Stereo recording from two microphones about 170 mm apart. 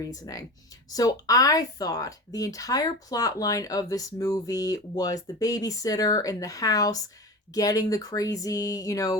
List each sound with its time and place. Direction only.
0.0 s speech: 20° left (ahead or behind)